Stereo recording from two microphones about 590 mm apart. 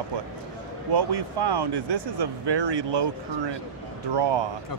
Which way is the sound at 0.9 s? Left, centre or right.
Right.